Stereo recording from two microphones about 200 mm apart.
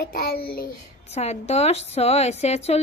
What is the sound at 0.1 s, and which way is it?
Speech, 50° left (ahead or behind).